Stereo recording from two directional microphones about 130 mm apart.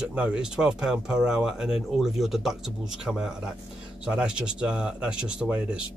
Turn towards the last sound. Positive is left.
turn(degrees=-10)  # may be behind; listen again after turning